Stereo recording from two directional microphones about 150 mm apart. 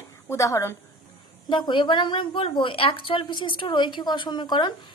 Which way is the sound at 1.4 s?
30° left (ahead or behind).